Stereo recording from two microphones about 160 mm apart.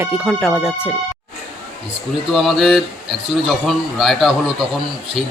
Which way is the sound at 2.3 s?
Centre (ahead or behind).